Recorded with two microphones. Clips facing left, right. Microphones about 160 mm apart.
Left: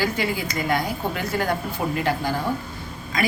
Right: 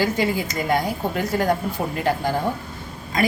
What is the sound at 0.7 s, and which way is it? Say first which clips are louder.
A woman's voice: right 4 dB; 40° right (ahead or behind).